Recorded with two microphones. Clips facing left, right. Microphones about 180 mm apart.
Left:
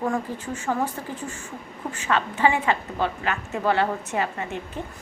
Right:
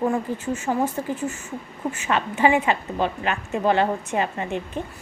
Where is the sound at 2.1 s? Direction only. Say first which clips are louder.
Right 2 dB; 15° right (ahead or behind).